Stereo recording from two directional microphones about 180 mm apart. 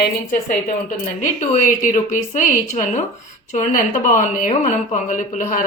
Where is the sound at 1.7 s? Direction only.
45° left (ahead or behind).